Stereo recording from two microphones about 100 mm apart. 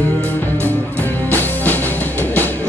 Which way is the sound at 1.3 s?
20° left (ahead or behind).